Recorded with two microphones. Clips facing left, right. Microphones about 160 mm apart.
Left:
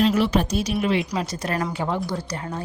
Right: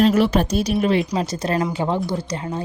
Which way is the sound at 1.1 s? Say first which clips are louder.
Right 4 dB; 25° right (ahead or behind).